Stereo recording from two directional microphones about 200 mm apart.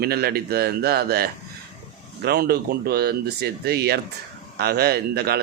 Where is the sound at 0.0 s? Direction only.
50° right (ahead or behind).